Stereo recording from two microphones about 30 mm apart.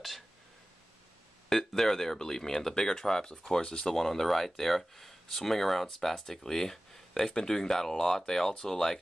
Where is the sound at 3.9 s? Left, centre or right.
Centre.